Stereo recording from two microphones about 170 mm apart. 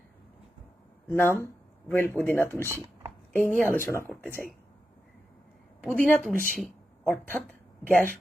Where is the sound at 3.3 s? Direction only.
10° left (ahead or behind).